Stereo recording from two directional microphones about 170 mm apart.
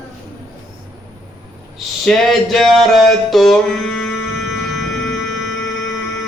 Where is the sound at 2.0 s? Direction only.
Centre (ahead or behind).